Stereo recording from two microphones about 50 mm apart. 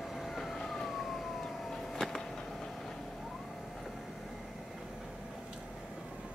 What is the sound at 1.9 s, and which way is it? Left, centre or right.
Music, centre.